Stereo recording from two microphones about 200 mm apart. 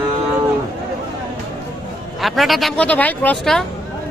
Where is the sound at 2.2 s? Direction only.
Centre (ahead or behind).